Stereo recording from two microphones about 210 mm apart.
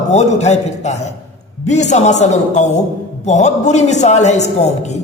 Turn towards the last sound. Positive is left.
turn(degrees=35)  # may be behind; listen again after turning